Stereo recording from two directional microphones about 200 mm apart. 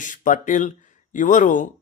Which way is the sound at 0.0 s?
40° left (ahead or behind).